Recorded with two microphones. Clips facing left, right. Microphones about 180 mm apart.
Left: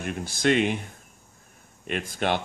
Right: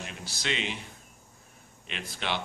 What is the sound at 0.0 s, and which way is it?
Speech, 50° left (ahead or behind).